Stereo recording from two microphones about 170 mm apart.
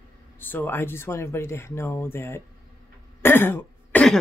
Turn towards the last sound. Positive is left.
turn(degrees=10)  # may be behind; listen again after turning